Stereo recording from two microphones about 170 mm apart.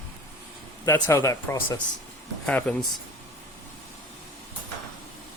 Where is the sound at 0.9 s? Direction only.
15° left (ahead or behind).